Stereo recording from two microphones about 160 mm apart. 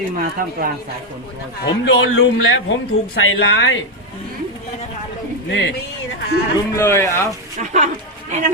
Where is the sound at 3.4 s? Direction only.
90° left.